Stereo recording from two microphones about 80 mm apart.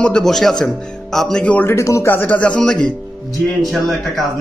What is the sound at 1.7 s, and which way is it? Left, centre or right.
Speech, left.